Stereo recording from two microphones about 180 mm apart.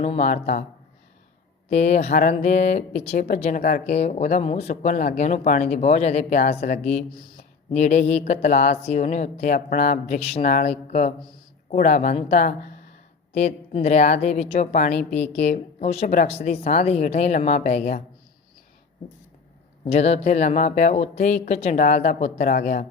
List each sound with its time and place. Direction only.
0.0 s a woman's voice: 35° left (ahead or behind)
1.7 s a woman's voice: 40° left (ahead or behind)
19.8 s a woman's voice: 35° left (ahead or behind)